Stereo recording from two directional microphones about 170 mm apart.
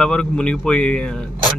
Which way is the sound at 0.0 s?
5° left (ahead or behind).